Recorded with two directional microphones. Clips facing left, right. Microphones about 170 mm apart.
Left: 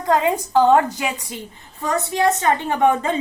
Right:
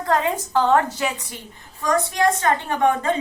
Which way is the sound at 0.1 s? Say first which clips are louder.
Left 3 dB; 15° left (ahead or behind).